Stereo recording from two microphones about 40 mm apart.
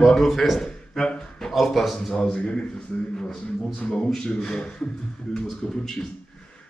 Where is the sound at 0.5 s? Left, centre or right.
Centre.